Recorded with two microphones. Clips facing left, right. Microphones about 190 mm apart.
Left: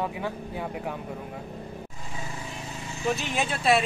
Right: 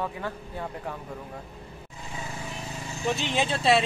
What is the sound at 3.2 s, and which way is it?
Speech, 30° right (ahead or behind).